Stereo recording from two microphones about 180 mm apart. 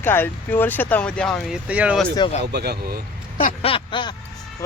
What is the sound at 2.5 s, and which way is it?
Speech, 65° right (ahead or behind).